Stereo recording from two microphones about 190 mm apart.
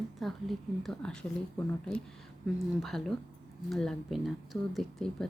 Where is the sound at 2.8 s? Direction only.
Centre (ahead or behind).